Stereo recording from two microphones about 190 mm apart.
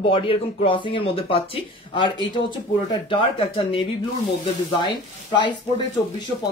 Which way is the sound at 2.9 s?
25° left (ahead or behind).